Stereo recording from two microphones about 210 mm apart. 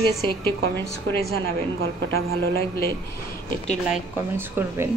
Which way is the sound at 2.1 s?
70° right (ahead or behind).